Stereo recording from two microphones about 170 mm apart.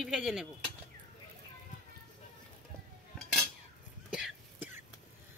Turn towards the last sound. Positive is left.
turn(degrees=-5)  # may be behind; listen again after turning